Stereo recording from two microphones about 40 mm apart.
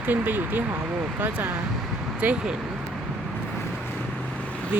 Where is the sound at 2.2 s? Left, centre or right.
Right.